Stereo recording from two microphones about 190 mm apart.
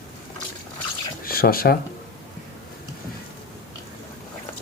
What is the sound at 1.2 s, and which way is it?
Speech, 50° left (ahead or behind).